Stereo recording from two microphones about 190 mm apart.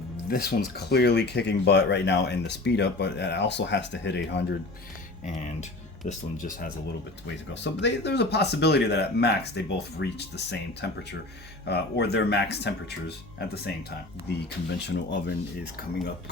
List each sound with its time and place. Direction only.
0.8 s speech: 60° left (ahead or behind)
6.1 s speech: 40° left (ahead or behind)
7.5 s speech: 70° left (ahead or behind)